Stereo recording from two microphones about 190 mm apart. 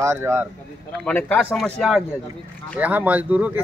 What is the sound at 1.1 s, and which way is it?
Speech, 10° left (ahead or behind).